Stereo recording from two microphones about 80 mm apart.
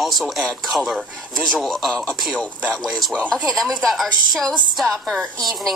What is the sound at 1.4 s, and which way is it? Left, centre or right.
A woman's voice, centre.